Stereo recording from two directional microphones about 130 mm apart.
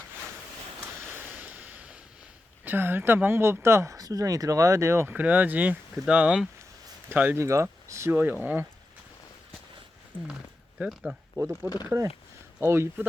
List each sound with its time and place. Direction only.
0.8 s a sound: 15° right (ahead or behind)
2.6 s speech: 15° right (ahead or behind)
10.8 s speech: 5° right (ahead or behind)
11.3 s speech: 20° right (ahead or behind)